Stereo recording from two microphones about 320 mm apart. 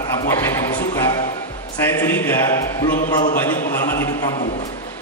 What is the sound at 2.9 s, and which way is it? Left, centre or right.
Speech, left.